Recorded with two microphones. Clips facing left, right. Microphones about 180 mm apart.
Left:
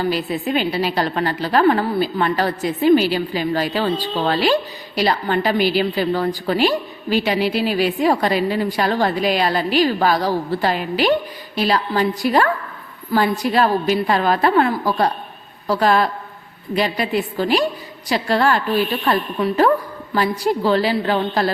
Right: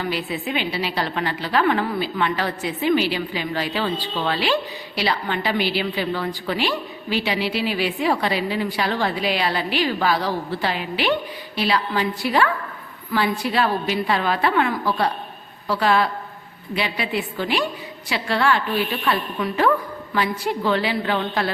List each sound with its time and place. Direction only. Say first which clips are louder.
0.0 s a woman's voice: left 5 dB; 40° left (ahead or behind)